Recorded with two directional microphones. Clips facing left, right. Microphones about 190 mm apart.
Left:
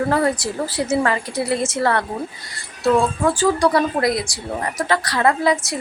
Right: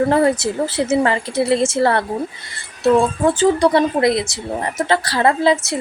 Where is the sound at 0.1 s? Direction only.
25° right (ahead or behind).